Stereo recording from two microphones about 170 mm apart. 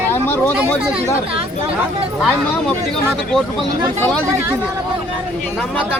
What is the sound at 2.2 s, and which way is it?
Speech, 5° left (ahead or behind).